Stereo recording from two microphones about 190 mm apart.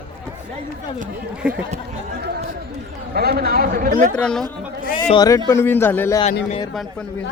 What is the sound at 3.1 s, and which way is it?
Speech, 55° right (ahead or behind).